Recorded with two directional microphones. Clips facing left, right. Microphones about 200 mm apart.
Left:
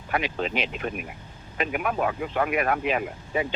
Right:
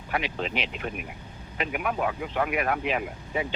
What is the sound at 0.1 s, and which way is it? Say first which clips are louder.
Speech: left 2 dB; 50° left (ahead or behind).